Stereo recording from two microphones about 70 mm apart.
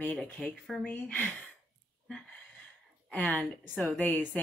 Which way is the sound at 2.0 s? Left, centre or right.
Centre.